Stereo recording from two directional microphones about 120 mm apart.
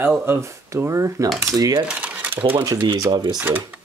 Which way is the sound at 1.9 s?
10° right (ahead or behind).